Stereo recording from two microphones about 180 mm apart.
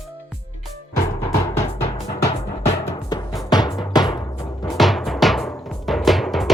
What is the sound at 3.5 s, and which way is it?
Music, 20° left (ahead or behind).